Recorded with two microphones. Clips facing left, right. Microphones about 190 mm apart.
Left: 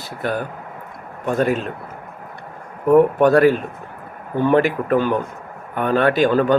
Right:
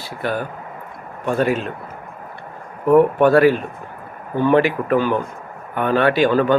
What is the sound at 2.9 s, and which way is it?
Speech, 40° left (ahead or behind).